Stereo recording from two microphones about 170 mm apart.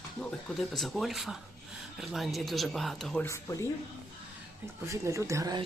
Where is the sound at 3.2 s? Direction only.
15° left (ahead or behind).